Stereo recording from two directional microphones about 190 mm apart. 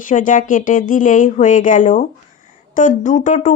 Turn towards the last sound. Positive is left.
turn(degrees=40)  # may be behind; listen again after turning